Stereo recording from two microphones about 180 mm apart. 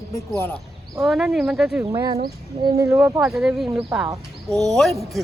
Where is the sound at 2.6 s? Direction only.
20° right (ahead or behind).